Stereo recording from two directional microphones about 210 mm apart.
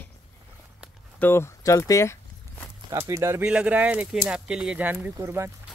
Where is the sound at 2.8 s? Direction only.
15° right (ahead or behind).